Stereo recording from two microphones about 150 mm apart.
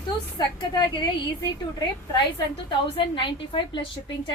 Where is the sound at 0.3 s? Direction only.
30° left (ahead or behind).